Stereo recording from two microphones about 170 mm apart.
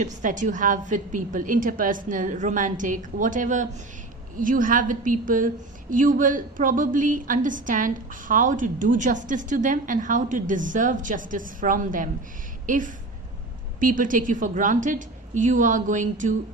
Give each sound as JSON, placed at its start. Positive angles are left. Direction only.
{"t": 0.0, "sound": "a woman's voice", "side_deg": -50}